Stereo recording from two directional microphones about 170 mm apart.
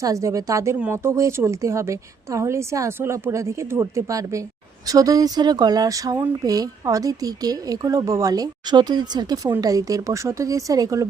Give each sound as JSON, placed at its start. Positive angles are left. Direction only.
{"t": 0.0, "sound": "speech", "side_deg": -20}